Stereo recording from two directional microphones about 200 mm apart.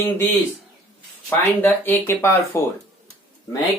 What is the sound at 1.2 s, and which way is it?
Speech, 10° left (ahead or behind).